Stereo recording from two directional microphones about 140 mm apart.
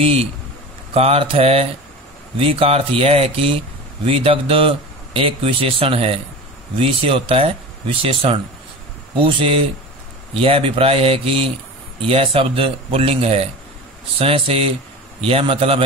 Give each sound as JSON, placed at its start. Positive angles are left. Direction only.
{"t": 0.0, "sound": "speech", "side_deg": -45}